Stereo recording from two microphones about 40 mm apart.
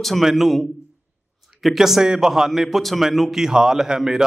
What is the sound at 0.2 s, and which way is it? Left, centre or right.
A man's voice, centre.